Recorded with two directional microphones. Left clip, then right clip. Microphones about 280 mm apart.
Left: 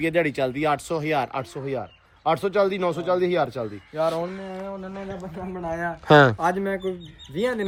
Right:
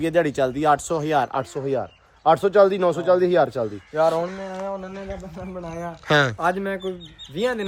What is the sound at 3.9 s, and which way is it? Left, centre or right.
Speech, right.